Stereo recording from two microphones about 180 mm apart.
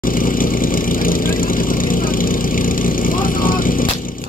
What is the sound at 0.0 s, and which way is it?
Vehicle, 50° left (ahead or behind).